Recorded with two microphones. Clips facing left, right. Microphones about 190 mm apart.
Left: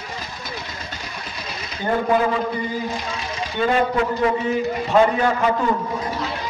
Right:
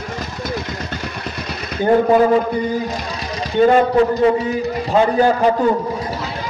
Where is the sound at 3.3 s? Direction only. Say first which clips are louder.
Right 8 dB; 40° right (ahead or behind).